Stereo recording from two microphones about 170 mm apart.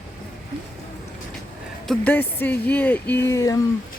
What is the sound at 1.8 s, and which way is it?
A woman's voice, 10° left (ahead or behind).